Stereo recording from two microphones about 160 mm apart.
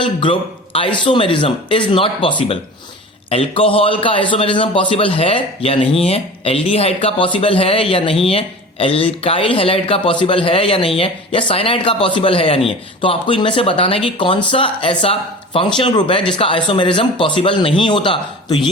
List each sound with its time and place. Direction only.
0.0 s a man's voice: 30° left (ahead or behind)